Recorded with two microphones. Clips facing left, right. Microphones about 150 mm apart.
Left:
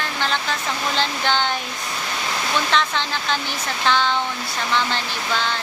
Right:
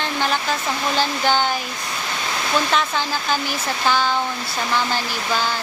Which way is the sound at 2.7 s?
10° right (ahead or behind).